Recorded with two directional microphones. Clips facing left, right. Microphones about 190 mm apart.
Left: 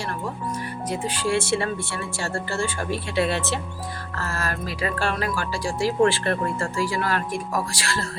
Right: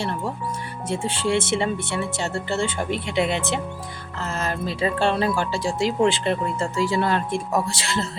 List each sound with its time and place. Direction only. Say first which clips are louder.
0.9 s speech: right 2 dB; 25° right (ahead or behind)